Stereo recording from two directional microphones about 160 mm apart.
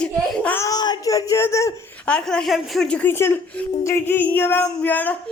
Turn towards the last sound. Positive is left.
turn(degrees=10)  # may be behind; listen again after turning